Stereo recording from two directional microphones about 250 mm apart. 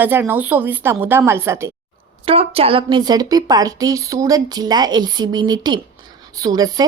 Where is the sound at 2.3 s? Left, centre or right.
Right.